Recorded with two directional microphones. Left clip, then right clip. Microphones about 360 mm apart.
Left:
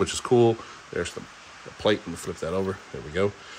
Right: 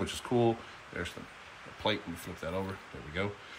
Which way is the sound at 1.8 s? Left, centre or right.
Centre.